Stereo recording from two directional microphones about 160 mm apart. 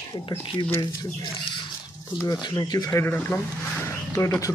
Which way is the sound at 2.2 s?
25° left (ahead or behind).